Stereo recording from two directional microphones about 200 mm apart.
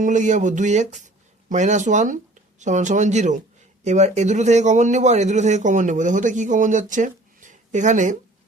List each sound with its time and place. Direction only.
0.0 s speech: 40° right (ahead or behind)